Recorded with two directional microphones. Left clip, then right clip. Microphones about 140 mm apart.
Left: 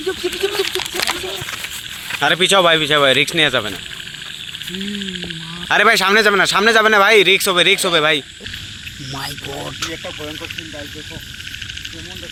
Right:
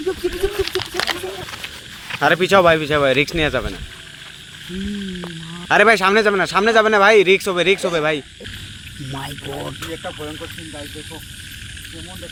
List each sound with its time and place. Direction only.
0.6 s a sound: 35° right (ahead or behind)
1.6 s speech: centre (ahead or behind)
5.6 s speech: 5° right (ahead or behind)